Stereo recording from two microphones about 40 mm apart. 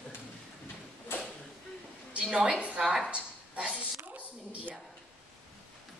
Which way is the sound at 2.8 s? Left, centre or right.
Centre.